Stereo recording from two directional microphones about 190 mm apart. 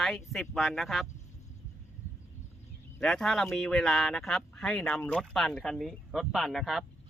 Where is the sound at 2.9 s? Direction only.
Centre (ahead or behind).